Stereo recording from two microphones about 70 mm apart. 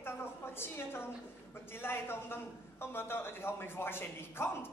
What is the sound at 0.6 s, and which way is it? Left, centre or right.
A man's voice, left.